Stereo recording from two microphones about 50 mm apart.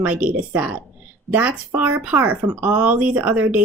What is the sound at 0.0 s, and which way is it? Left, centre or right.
Speech, right.